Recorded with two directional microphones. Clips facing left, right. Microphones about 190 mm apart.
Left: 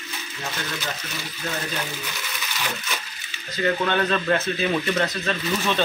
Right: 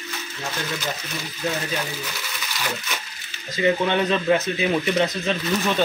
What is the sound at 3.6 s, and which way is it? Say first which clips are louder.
Speech: right 2 dB; 15° right (ahead or behind).